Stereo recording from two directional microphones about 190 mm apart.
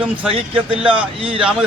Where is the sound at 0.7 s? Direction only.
30° right (ahead or behind).